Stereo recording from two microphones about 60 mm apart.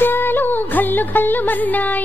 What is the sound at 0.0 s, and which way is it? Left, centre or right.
Music, left.